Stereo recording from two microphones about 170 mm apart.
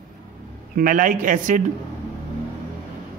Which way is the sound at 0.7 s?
50° right (ahead or behind).